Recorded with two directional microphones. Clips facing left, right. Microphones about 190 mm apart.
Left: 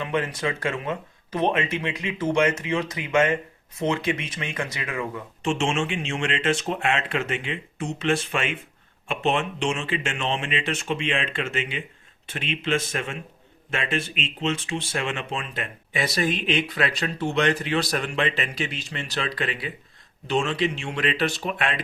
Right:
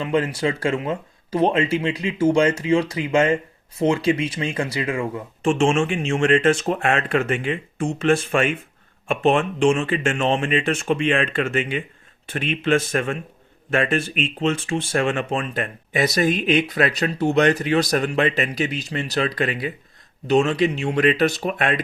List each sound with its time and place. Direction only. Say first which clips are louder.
0.0 s speech: right 5 dB; 30° right (ahead or behind)
5.4 s speech: right 6 dB; 50° right (ahead or behind)